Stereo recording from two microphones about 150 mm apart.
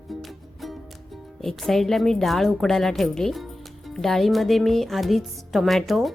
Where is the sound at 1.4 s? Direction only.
Centre (ahead or behind).